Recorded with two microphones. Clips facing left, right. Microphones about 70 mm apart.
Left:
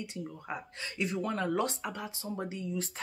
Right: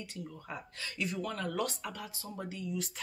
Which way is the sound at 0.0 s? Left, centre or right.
Left.